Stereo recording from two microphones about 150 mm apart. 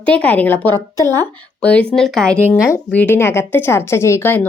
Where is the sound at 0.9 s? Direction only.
25° right (ahead or behind).